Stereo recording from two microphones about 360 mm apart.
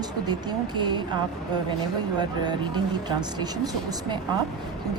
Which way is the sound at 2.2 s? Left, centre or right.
Centre.